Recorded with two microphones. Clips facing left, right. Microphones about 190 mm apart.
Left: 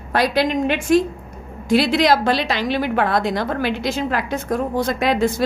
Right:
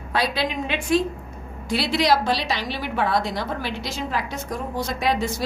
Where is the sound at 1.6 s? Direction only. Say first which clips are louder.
Left 6 dB; 50° left (ahead or behind).